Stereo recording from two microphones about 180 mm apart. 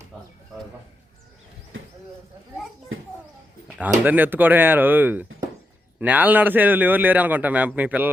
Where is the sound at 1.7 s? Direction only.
90° right.